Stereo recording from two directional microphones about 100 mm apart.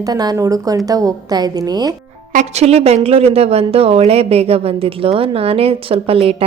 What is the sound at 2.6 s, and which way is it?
A woman's voice, 90° right.